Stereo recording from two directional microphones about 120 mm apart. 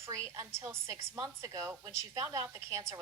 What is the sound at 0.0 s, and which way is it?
A woman's voice, 25° right (ahead or behind).